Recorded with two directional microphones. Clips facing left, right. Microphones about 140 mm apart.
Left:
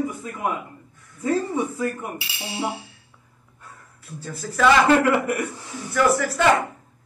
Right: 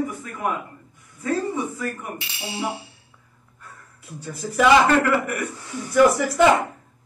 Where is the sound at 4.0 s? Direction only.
15° right (ahead or behind).